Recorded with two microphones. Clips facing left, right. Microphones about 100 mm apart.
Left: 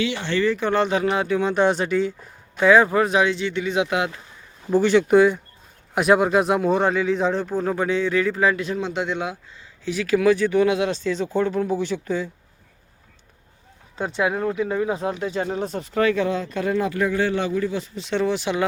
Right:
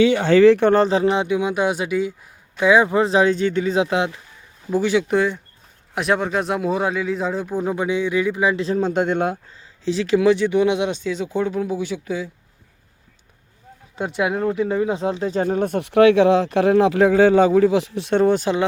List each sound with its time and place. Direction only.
0.4 s speech: 65° right (ahead or behind)
0.7 s speech: 35° right (ahead or behind); by 3.0 s 15° right (ahead or behind)
3.0 s speech: 30° right (ahead or behind)
4.7 s speech: 5° right (ahead or behind)
8.5 s speech: 35° right (ahead or behind)
9.8 s speech: 30° right (ahead or behind); by 12.3 s 5° right (ahead or behind)
13.9 s speech: 15° right (ahead or behind)
15.3 s speech: 45° right (ahead or behind)